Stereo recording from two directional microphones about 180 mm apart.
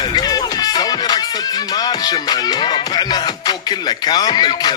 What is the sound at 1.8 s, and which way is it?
Speech, 20° left (ahead or behind).